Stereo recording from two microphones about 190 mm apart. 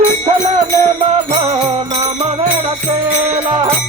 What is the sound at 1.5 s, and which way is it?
Music, 30° right (ahead or behind).